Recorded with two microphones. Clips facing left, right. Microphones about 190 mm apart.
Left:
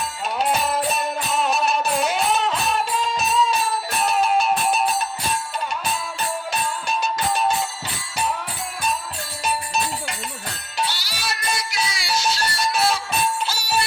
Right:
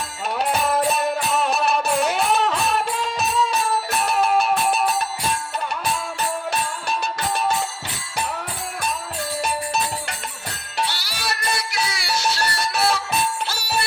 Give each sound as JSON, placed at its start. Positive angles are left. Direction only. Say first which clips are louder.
{"t": 0.3, "sound": "music", "louder": "right 1 dB", "side_deg": -60}
{"t": 6.5, "sound": "music", "louder": "even", "side_deg": -60}
{"t": 10.8, "sound": "music", "louder": "even", "side_deg": -60}